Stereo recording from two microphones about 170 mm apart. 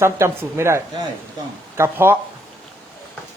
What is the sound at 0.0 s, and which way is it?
Speech, 15° right (ahead or behind).